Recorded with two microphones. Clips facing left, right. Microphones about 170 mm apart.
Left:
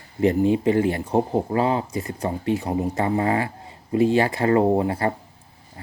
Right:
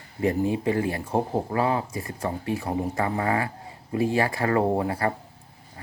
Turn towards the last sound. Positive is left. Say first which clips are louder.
# left 4 dB
turn(degrees=25)  # may be behind; listen again after turning